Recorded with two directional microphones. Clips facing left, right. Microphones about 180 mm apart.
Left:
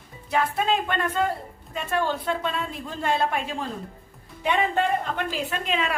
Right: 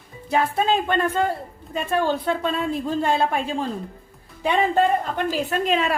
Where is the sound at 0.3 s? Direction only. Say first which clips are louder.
Right 3 dB; 30° right (ahead or behind).